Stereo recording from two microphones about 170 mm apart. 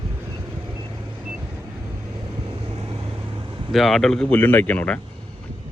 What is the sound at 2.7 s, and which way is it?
Vehicle, 30° right (ahead or behind).